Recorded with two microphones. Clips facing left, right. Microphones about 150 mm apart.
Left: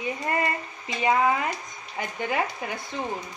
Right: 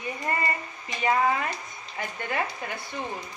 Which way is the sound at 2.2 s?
15° left (ahead or behind).